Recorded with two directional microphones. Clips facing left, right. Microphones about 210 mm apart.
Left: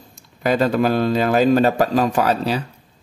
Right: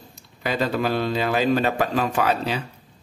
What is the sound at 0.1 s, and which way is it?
A man's voice, 45° left (ahead or behind).